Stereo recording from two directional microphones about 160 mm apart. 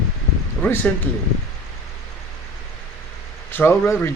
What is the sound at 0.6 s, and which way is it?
Speech, 10° left (ahead or behind).